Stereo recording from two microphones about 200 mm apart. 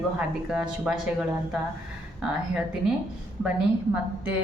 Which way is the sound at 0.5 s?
5° right (ahead or behind).